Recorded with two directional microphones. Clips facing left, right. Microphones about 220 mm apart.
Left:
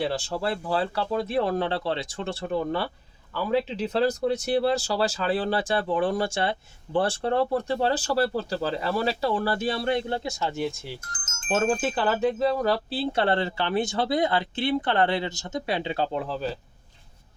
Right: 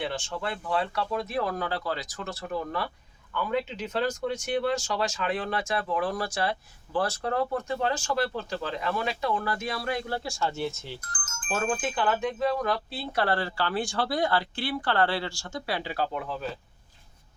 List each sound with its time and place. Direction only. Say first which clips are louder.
0.0 s speech: left 5 dB; 35° left (ahead or behind); by 10.9 s 15° left (ahead or behind)
11.1 s speech: left 6 dB; 25° left (ahead or behind)